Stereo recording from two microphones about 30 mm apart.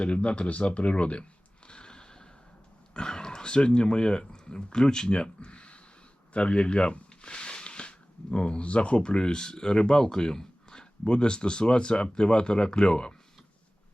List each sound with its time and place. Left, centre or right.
0.0 s speech: left
1.6 s a sound: left
2.9 s speech: left